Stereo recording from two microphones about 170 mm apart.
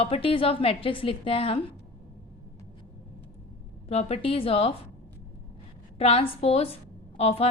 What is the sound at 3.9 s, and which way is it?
Speech, 35° left (ahead or behind).